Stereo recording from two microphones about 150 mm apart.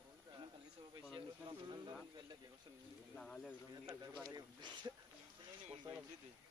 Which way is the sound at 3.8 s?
25° right (ahead or behind).